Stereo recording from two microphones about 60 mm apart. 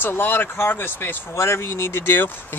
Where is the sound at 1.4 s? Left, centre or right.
Left.